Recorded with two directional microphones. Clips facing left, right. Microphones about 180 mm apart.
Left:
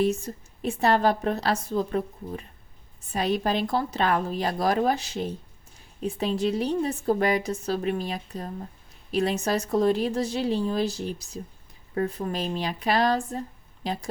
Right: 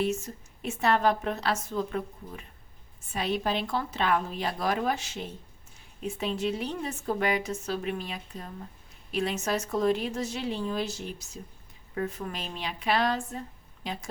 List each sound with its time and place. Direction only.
0.0 s speech: 35° left (ahead or behind)